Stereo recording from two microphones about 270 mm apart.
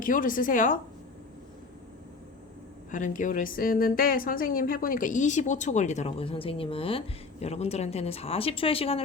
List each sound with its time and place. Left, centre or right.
0.0 s a woman's voice: left
2.9 s a woman's voice: left